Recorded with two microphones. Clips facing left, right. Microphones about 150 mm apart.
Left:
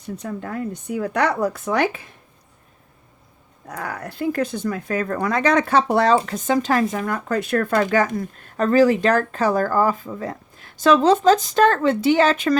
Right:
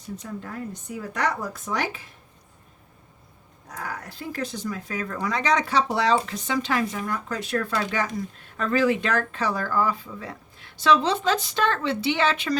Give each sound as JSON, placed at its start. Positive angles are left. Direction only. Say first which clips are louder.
{"t": 0.2, "sound": "speech", "louder": "left 9 dB", "side_deg": 65}
{"t": 3.7, "sound": "speech", "louder": "left 5 dB", "side_deg": 65}
{"t": 7.0, "sound": "speech", "louder": "left 6 dB", "side_deg": 55}
{"t": 8.5, "sound": "speech", "louder": "left 7 dB", "side_deg": 40}